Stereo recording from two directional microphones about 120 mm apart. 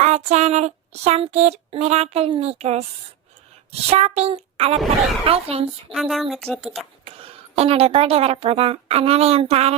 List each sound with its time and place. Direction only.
0.0 s a sound: 70° right (ahead or behind)
5.9 s speech: centre (ahead or behind)
7.0 s a woman's voice: 55° right (ahead or behind)